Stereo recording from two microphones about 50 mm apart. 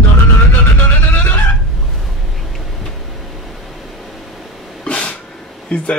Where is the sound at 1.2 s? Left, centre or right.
Left.